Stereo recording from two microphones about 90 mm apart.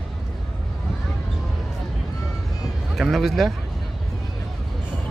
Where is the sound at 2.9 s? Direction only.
Centre (ahead or behind).